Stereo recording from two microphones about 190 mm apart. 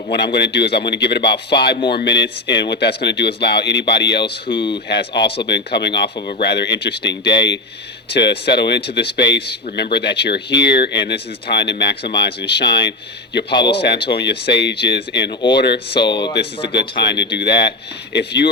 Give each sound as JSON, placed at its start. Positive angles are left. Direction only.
{"t": 0.1, "sound": "speech", "side_deg": 60}
{"t": 4.2, "sound": "speech", "side_deg": 25}
{"t": 4.9, "sound": "speech", "side_deg": 65}
{"t": 16.0, "sound": "speech", "side_deg": 25}
{"t": 16.6, "sound": "speech", "side_deg": 60}